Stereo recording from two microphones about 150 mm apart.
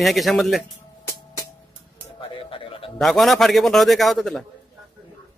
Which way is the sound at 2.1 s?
35° left (ahead or behind).